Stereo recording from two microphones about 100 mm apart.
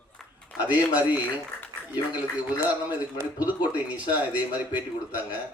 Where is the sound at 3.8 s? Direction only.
15° right (ahead or behind).